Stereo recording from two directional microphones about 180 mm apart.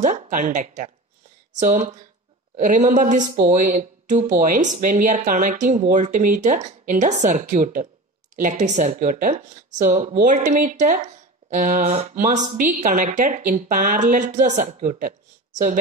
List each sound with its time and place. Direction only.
0.0 s speech: 45° right (ahead or behind)